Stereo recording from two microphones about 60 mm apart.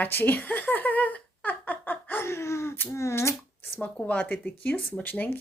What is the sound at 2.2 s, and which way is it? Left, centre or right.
Speech, left.